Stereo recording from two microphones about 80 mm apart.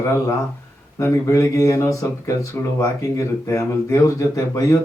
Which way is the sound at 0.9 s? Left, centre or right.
Left.